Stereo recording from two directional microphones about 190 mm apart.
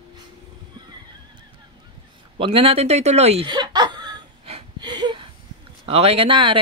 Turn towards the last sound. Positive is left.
turn(degrees=-25)  # may be behind; listen again after turning